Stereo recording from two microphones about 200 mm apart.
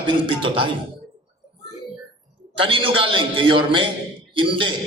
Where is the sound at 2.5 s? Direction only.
25° right (ahead or behind).